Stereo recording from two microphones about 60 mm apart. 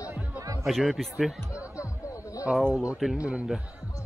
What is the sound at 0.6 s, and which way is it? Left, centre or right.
Speech, centre.